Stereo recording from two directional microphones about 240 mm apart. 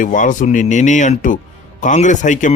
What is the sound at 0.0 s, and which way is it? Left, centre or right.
Speech, left.